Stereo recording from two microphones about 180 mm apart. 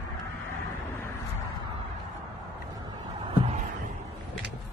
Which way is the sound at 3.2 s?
30° right (ahead or behind).